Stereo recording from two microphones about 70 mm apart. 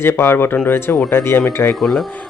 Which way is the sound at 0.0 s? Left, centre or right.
Left.